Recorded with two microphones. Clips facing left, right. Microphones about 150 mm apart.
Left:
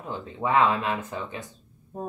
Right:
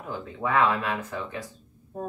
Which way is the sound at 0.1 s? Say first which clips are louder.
Left 2 dB; 20° left (ahead or behind).